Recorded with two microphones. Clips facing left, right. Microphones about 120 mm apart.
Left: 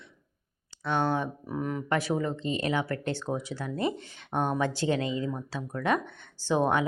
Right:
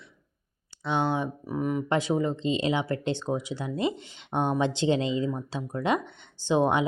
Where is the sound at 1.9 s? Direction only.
20° right (ahead or behind).